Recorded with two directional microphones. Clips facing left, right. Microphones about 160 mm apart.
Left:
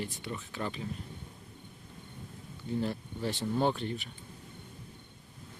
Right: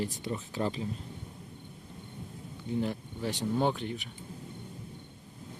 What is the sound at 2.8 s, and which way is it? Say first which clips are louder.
Speech: right 1 dB; 15° right (ahead or behind).